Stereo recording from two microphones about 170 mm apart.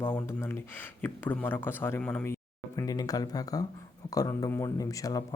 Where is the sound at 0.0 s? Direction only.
10° left (ahead or behind).